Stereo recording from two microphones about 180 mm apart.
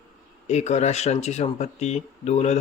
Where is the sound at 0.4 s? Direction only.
40° left (ahead or behind).